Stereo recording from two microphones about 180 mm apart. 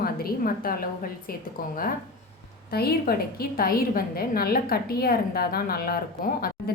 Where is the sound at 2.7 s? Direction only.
60° left (ahead or behind).